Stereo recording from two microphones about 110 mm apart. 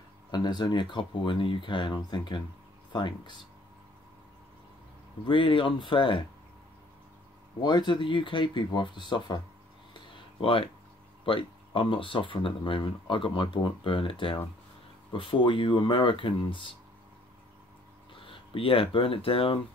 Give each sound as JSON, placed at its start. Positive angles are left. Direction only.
{"t": 0.3, "sound": "speech", "side_deg": 40}
{"t": 5.2, "sound": "speech", "side_deg": 50}
{"t": 7.6, "sound": "speech", "side_deg": 45}
{"t": 9.9, "sound": "a sound", "side_deg": 50}
{"t": 11.2, "sound": "speech", "side_deg": 50}
{"t": 18.1, "sound": "speech", "side_deg": 55}